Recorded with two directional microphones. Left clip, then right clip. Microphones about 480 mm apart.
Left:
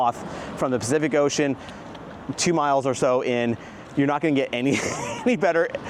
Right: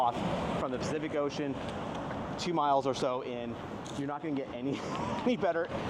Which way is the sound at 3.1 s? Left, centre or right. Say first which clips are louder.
Left 14 dB; left.